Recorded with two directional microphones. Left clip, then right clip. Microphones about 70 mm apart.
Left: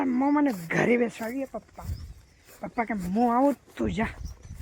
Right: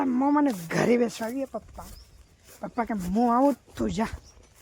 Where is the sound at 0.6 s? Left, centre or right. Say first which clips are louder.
Even; right.